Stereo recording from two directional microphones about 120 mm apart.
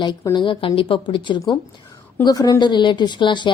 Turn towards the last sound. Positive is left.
turn(degrees=40)  # may be behind; listen again after turning